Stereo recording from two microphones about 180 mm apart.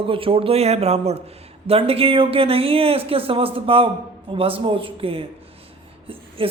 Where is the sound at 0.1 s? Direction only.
30° right (ahead or behind).